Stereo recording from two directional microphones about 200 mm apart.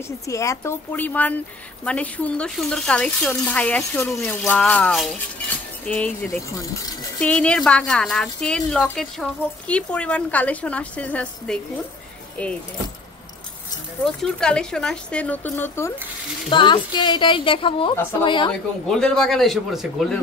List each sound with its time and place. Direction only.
0.3 s speech: 15° left (ahead or behind)
7.2 s speech: 5° left (ahead or behind)
14.0 s speech: 5° left (ahead or behind)
16.4 s a woman's voice: 25° left (ahead or behind)
18.5 s speech: 5° left (ahead or behind)